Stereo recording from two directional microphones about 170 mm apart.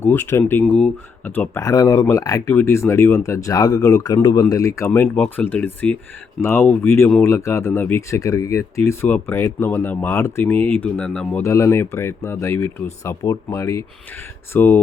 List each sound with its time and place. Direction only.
0.0 s speech: 10° left (ahead or behind)